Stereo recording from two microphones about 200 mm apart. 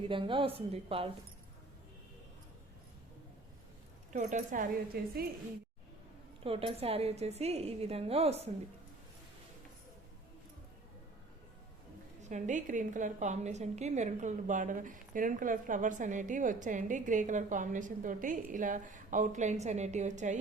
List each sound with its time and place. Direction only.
0.1 s a woman's voice: 25° right (ahead or behind)
4.1 s a woman's voice: 40° right (ahead or behind)
4.9 s a woman's voice: 50° right (ahead or behind)
6.4 s a woman's voice: 30° right (ahead or behind)
12.3 s a woman's voice: 40° right (ahead or behind)